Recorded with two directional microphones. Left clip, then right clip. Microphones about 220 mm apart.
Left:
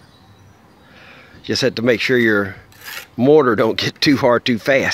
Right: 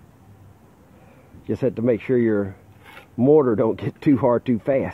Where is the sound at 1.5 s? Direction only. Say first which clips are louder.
Left 5 dB; 20° left (ahead or behind).